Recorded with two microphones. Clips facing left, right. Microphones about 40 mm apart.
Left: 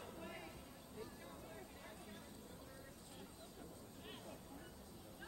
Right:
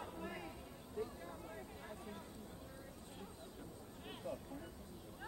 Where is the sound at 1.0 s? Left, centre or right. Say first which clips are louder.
Right 9 dB; right.